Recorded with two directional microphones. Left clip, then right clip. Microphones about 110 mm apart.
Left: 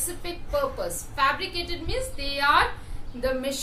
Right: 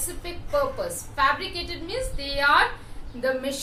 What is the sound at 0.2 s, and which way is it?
A woman's voice, 20° left (ahead or behind).